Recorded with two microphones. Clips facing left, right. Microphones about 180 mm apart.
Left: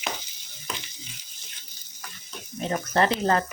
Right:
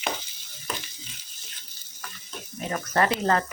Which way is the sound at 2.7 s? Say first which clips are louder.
Left 1 dB; 25° left (ahead or behind).